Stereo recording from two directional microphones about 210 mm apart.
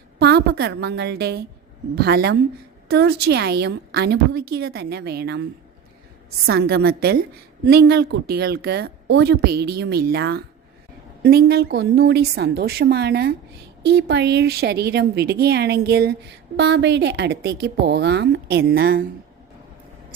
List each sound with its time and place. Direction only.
0.2 s a woman's voice: 50° right (ahead or behind)